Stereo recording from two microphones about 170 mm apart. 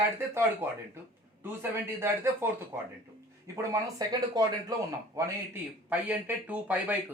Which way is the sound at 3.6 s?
20° right (ahead or behind).